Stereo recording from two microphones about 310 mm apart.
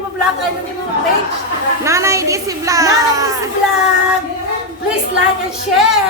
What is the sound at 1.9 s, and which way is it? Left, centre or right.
Speech, centre.